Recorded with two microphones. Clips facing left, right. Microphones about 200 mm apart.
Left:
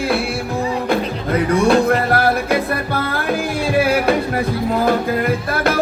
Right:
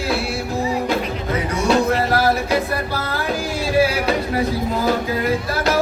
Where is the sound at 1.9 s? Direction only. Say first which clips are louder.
Left 2 dB; 55° left (ahead or behind).